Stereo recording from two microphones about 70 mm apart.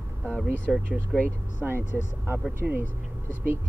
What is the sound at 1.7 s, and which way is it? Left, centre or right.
Speech, right.